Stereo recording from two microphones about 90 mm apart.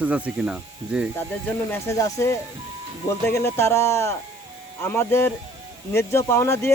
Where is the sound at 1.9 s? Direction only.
40° left (ahead or behind).